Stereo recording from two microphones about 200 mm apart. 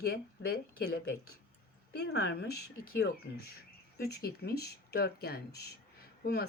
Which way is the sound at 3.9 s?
50° left (ahead or behind).